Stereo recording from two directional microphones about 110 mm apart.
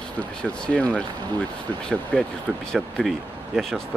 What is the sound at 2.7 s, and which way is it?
Speech, centre (ahead or behind).